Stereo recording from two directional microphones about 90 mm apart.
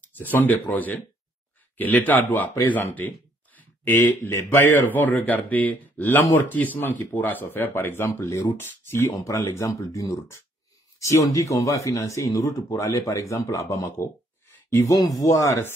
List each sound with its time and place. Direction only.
0.0 s speech: 20° left (ahead or behind); by 15.6 s 40° left (ahead or behind)